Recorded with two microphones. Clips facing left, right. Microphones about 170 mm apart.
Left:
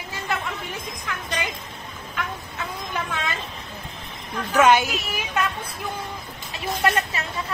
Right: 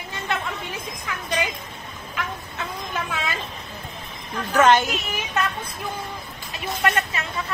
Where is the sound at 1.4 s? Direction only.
Centre (ahead or behind).